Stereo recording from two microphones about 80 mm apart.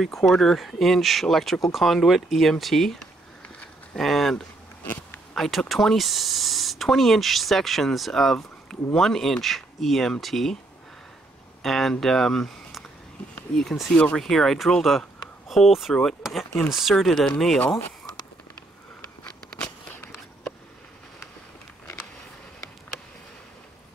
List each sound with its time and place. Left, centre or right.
0.0 s speech: centre
11.6 s speech: centre
16.2 s a sound: centre
16.8 s speech: centre
19.2 s biting: centre